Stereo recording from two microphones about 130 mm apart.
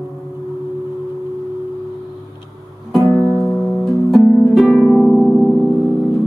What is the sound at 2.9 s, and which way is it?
Music, centre (ahead or behind).